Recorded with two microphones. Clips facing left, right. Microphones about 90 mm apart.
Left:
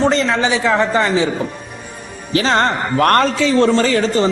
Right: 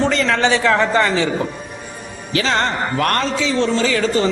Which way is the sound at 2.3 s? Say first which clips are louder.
Left 3 dB; 40° left (ahead or behind).